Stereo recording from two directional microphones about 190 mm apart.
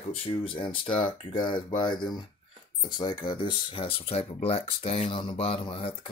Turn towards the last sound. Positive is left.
turn(degrees=25)  # may be behind; listen again after turning